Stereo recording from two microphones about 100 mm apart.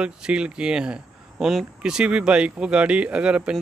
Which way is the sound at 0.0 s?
10° right (ahead or behind).